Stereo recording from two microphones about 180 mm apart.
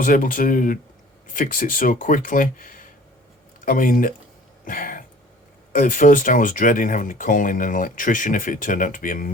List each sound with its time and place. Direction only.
0.0 s speech: 50° left (ahead or behind)
4.6 s a sound: 50° left (ahead or behind)
5.7 s speech: 50° left (ahead or behind)